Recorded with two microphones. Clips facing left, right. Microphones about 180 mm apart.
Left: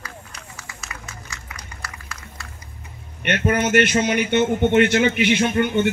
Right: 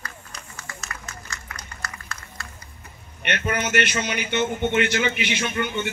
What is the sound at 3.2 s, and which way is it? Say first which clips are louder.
A man's voice: left 6 dB; 45° left (ahead or behind).